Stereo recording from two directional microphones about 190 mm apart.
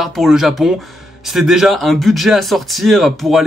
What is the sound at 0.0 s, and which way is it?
Speech, centre (ahead or behind).